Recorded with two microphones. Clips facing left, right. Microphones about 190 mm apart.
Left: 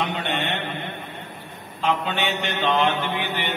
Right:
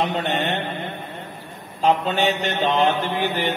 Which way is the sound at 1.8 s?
40° right (ahead or behind).